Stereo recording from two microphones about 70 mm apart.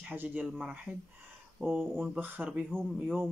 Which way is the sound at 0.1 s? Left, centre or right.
Right.